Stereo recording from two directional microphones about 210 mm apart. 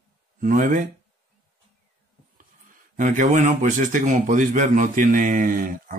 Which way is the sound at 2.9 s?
40° right (ahead or behind).